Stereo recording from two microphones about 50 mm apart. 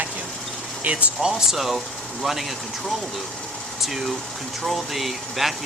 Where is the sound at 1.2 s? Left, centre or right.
Centre.